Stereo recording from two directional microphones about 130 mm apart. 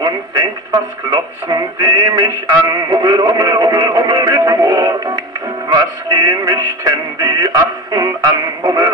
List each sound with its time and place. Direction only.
0.0 s speech: 25° right (ahead or behind)